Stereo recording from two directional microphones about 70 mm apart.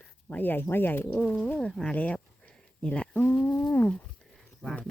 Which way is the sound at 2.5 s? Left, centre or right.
Centre.